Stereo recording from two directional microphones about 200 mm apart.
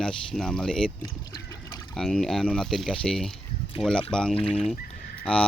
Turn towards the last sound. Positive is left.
turn(degrees=5)  # may be behind; listen again after turning